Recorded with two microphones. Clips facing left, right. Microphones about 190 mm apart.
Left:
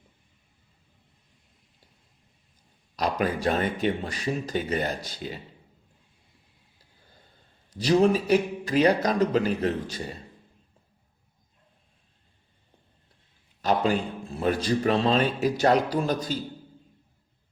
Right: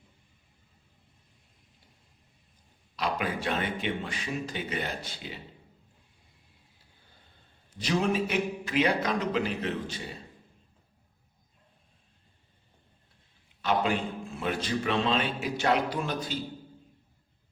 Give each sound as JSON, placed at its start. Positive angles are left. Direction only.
{"t": 2.9, "sound": "a man's voice", "side_deg": 40}
{"t": 7.7, "sound": "a man's voice", "side_deg": 35}
{"t": 13.6, "sound": "a man's voice", "side_deg": 40}